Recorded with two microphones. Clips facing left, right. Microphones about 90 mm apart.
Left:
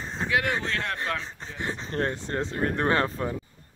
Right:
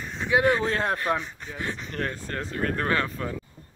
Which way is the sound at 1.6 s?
25° left (ahead or behind).